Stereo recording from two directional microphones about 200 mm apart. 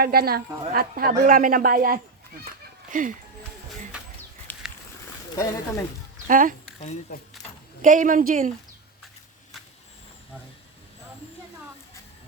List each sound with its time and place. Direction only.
0.0 s a woman's voice: 50° right (ahead or behind)
4.5 s a sound: 10° left (ahead or behind)
5.3 s speech: 15° left (ahead or behind)
6.2 s speech: 40° right (ahead or behind)
6.7 s speech: 35° left (ahead or behind)
7.8 s a woman's voice: 40° right (ahead or behind)